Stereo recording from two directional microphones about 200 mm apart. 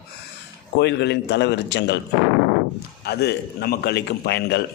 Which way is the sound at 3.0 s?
55° left (ahead or behind).